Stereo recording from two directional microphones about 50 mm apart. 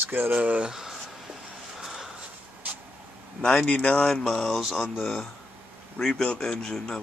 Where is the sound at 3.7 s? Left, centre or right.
Left.